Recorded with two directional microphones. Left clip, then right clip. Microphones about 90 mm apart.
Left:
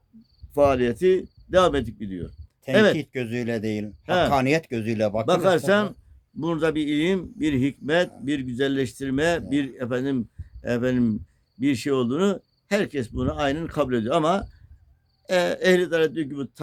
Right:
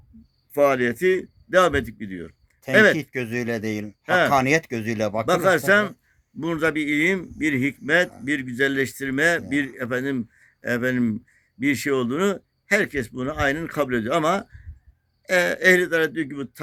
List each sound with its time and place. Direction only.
0.5 s speech: 15° left (ahead or behind)
3.0 s speech: 55° right (ahead or behind)
4.0 s speech: 25° left (ahead or behind)
4.3 s speech: 40° right (ahead or behind)
5.2 s speech: 20° left (ahead or behind)